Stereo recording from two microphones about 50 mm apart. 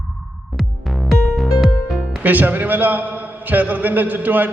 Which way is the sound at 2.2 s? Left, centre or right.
Right.